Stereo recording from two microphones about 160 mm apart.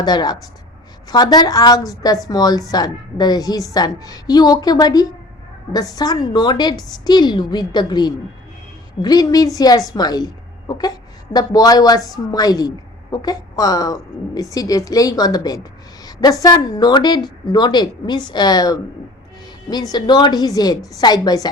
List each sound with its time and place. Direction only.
0.0 s a woman's voice: 25° left (ahead or behind)